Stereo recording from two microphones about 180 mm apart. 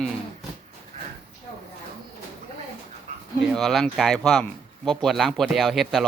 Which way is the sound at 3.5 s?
Centre (ahead or behind).